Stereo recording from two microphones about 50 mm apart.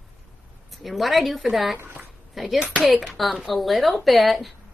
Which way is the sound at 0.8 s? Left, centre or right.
Centre.